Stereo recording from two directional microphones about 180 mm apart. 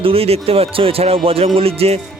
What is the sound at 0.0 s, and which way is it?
Speech, 30° right (ahead or behind).